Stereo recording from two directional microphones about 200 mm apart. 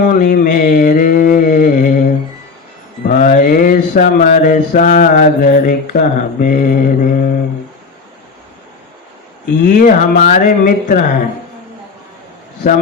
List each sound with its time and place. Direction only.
0.0 s mantra: 45° left (ahead or behind)
9.6 s speech: 40° left (ahead or behind)